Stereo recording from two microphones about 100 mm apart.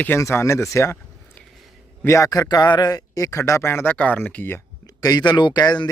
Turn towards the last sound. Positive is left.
turn(degrees=45)  # may be behind; listen again after turning